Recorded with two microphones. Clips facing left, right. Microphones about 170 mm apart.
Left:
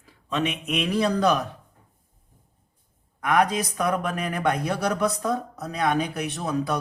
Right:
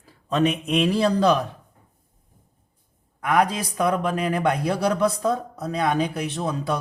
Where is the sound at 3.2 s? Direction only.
30° right (ahead or behind).